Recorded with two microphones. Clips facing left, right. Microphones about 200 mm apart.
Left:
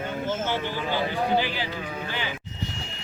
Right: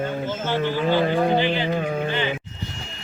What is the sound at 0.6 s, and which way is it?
Speech, 50° right (ahead or behind).